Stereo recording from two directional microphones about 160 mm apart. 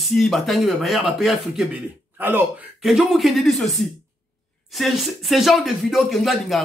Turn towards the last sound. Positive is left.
turn(degrees=0)  # may be behind; listen again after turning